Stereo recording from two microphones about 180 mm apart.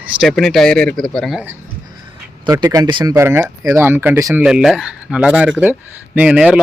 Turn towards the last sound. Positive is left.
turn(degrees=-5)  # may be behind; listen again after turning